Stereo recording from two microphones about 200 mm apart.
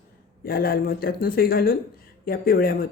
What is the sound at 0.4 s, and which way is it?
Speech, 50° left (ahead or behind).